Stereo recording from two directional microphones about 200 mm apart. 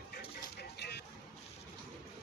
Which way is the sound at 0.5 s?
55° left (ahead or behind).